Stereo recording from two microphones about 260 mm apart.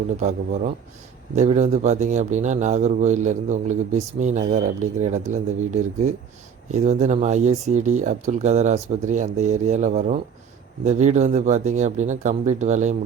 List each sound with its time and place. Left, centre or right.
0.2 s speech: right